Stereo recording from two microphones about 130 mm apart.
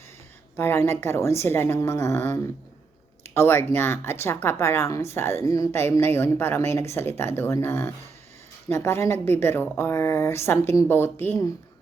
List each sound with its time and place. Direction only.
0.5 s a woman's voice: 20° left (ahead or behind)